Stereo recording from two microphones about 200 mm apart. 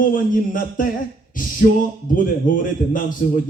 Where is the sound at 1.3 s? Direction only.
40° left (ahead or behind).